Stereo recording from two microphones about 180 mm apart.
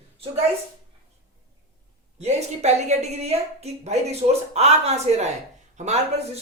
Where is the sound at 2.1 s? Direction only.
35° right (ahead or behind).